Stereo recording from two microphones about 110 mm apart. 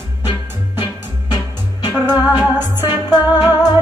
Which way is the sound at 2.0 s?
35° left (ahead or behind).